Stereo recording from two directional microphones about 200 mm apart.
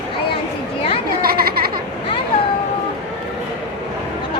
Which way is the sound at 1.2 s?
50° right (ahead or behind).